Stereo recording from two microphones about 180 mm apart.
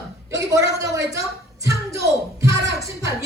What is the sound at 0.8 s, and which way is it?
A woman's voice, 15° right (ahead or behind).